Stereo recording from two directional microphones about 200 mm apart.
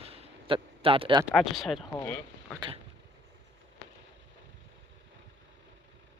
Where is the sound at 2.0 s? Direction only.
10° left (ahead or behind).